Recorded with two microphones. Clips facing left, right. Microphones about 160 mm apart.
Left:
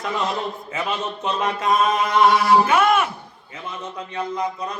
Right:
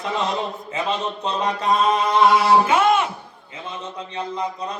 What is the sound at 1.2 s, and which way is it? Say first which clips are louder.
Mantra: even; 30° right (ahead or behind).